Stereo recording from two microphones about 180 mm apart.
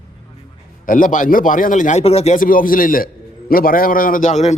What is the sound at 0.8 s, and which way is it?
A man's voice, 50° left (ahead or behind).